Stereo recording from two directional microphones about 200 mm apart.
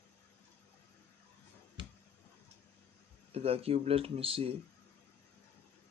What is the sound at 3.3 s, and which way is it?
Speech, 30° right (ahead or behind).